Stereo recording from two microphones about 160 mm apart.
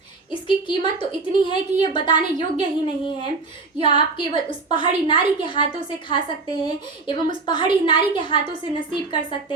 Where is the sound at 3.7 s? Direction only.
30° left (ahead or behind).